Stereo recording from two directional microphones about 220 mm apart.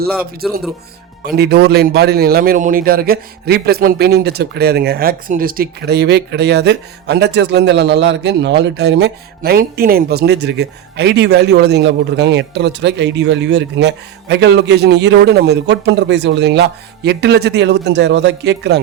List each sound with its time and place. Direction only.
0.1 s speech: centre (ahead or behind)
1.2 s a man's voice: 45° right (ahead or behind)